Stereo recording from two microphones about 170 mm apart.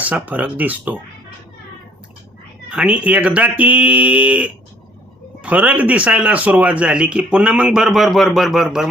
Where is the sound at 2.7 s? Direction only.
5° right (ahead or behind).